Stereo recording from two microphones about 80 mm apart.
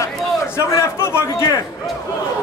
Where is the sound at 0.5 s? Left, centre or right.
Left.